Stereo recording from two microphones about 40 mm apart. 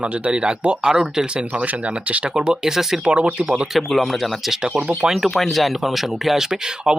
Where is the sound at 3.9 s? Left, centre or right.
Centre.